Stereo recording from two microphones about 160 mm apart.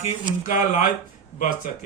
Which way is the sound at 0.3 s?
55° left (ahead or behind).